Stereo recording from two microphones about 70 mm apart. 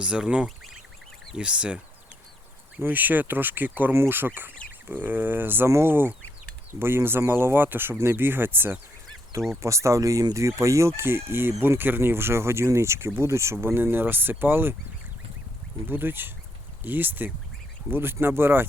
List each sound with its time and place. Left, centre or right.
0.0 s speech: centre
0.4 s speech: centre
1.4 s speech: centre
2.8 s speech: right
9.6 s speech: right
15.9 s speech: right